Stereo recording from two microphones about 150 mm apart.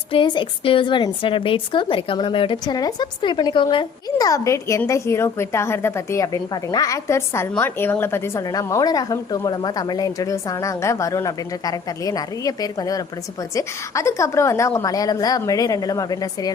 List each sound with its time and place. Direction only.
0.1 s a woman's voice: 35° left (ahead or behind)